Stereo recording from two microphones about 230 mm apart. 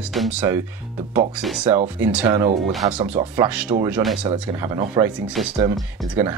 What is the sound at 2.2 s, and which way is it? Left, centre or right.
Speech, centre.